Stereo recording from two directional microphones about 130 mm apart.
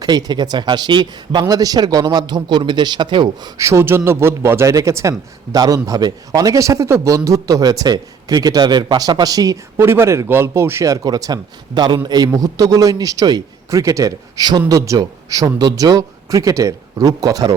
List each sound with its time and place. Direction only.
0.0 s speech: 30° right (ahead or behind)
3.6 s a man's voice: 20° right (ahead or behind)